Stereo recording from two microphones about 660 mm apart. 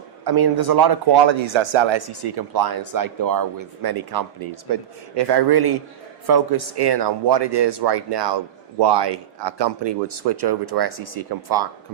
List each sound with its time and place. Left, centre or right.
0.3 s speech: right